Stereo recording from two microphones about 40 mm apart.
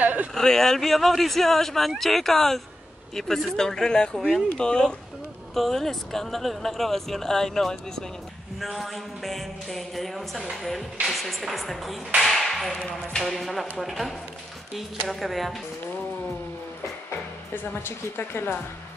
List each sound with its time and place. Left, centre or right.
0.0 s a sound: right
0.3 s speech: centre
5.5 s speech: centre
17.7 s speech: left